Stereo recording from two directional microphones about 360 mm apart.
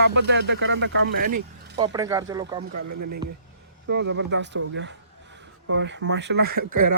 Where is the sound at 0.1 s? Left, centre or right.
Right.